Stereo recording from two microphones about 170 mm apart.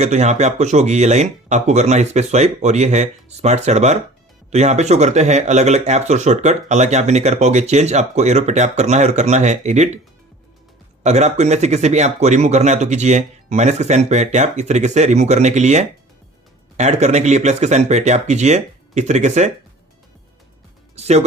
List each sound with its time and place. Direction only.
0.0 s speech: 40° right (ahead or behind)
11.0 s speech: 40° right (ahead or behind)
20.9 s music: 40° right (ahead or behind)